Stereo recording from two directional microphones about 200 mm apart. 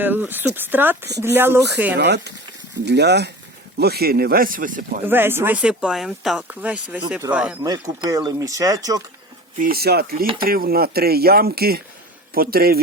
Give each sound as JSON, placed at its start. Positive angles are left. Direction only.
{"t": 0.0, "sound": "speech", "side_deg": -10}
{"t": 2.0, "sound": "speech", "side_deg": -55}
{"t": 5.0, "sound": "speech", "side_deg": -10}
{"t": 7.6, "sound": "speech", "side_deg": -15}
{"t": 9.6, "sound": "speech", "side_deg": -50}